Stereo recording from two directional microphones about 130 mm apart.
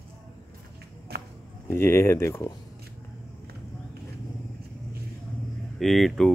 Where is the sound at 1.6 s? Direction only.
20° left (ahead or behind).